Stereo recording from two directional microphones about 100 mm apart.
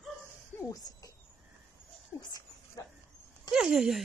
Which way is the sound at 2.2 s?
40° left (ahead or behind).